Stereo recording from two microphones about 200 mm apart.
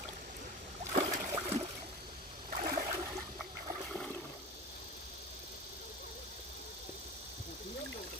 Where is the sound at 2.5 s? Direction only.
45° right (ahead or behind).